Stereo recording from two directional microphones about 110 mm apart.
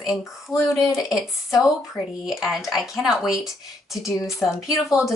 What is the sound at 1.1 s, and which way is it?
Speech, 5° right (ahead or behind).